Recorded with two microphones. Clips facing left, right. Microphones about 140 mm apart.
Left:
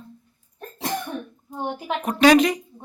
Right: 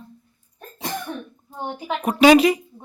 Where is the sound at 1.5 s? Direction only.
Centre (ahead or behind).